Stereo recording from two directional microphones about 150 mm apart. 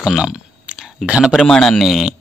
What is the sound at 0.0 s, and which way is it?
Speech, 5° right (ahead or behind).